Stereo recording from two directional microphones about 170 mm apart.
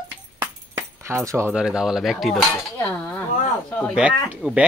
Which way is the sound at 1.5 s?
5° right (ahead or behind).